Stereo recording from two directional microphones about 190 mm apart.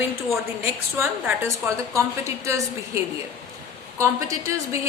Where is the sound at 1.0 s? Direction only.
15° right (ahead or behind).